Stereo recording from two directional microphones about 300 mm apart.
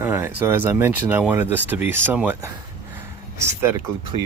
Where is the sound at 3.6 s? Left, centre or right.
Centre.